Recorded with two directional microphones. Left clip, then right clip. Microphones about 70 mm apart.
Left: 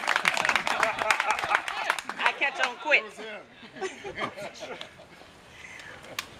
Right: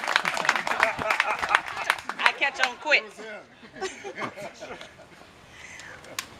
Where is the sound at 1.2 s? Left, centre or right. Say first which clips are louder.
Right 2 dB; right.